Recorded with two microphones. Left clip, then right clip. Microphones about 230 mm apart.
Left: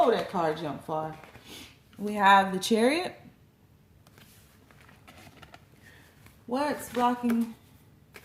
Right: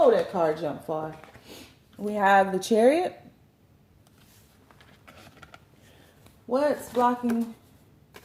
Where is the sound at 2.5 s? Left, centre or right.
Left.